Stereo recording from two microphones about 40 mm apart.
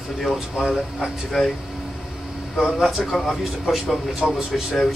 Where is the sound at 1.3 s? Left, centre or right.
Centre.